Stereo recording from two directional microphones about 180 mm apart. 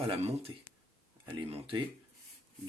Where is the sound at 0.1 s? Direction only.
35° right (ahead or behind).